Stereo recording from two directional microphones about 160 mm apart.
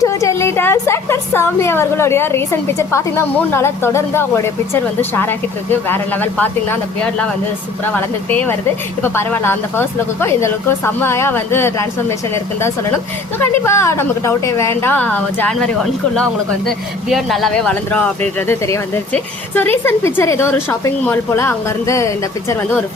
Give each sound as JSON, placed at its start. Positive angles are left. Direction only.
{"t": 0.0, "sound": "a woman's voice", "side_deg": 20}
{"t": 7.9, "sound": "a woman's voice", "side_deg": 10}
{"t": 13.4, "sound": "a woman's voice", "side_deg": 15}